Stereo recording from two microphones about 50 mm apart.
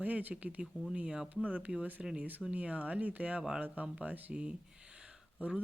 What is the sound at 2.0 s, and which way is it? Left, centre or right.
Speech, centre.